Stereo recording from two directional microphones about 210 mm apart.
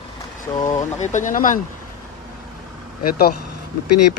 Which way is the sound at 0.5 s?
15° left (ahead or behind).